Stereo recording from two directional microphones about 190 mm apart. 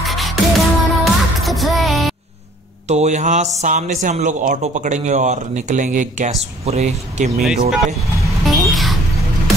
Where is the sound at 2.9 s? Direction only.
35° right (ahead or behind).